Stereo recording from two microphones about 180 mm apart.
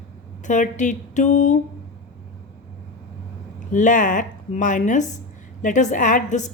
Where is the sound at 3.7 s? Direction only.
45° left (ahead or behind).